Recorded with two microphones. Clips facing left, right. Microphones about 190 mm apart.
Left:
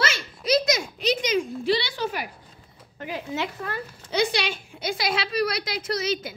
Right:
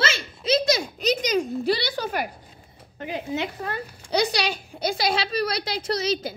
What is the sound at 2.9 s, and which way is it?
Speech, 20° right (ahead or behind).